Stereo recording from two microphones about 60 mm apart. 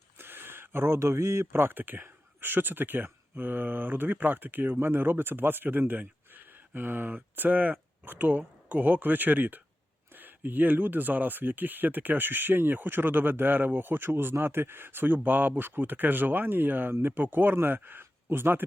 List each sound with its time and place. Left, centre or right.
0.2 s speech: right